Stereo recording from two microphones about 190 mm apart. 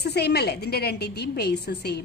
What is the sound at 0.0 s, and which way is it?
A woman's voice, 60° left (ahead or behind).